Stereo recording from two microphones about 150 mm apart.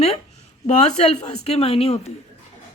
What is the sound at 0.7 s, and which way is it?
Speech, 50° left (ahead or behind).